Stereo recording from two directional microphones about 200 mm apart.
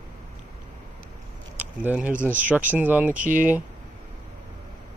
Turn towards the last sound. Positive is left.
turn(degrees=-40)  # may be behind; listen again after turning